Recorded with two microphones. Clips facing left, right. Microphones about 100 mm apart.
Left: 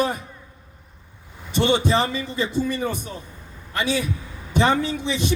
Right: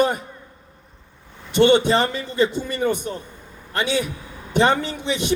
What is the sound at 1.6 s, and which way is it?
Speech, 60° right (ahead or behind).